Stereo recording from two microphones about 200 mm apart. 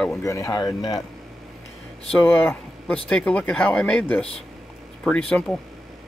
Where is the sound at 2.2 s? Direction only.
10° left (ahead or behind).